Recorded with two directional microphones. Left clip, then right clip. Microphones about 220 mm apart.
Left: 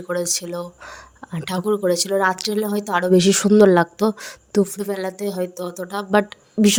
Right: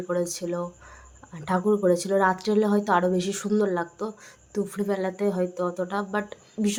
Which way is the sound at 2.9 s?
40° left (ahead or behind).